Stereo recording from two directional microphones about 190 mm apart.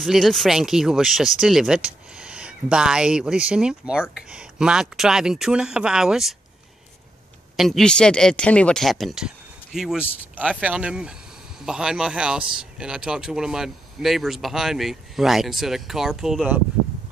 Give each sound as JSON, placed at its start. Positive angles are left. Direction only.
{"t": 0.0, "sound": "speech", "side_deg": 0}
{"t": 7.5, "sound": "speech", "side_deg": 0}